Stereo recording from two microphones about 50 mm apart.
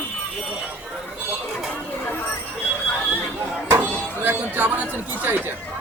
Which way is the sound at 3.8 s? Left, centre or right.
Right.